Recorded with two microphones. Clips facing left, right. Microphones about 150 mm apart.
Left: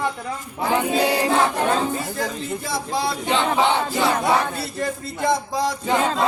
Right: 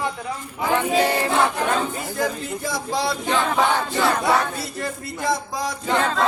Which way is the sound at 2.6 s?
25° left (ahead or behind).